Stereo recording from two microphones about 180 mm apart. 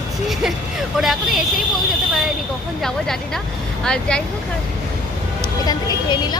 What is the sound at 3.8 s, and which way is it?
Vehicle, 5° left (ahead or behind).